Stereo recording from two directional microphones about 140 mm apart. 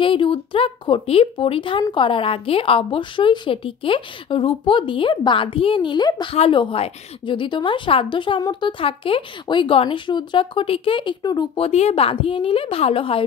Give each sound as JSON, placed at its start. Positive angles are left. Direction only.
{"t": 0.0, "sound": "speech", "side_deg": 40}
{"t": 6.3, "sound": "speech", "side_deg": 40}
{"t": 11.5, "sound": "speech", "side_deg": 45}